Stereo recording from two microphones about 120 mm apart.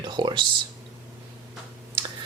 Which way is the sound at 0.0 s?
40° right (ahead or behind).